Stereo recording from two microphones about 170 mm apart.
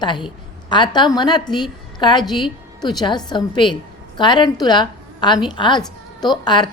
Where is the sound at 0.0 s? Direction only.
25° left (ahead or behind).